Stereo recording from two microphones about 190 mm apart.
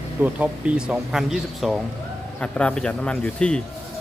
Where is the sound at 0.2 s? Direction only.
10° right (ahead or behind).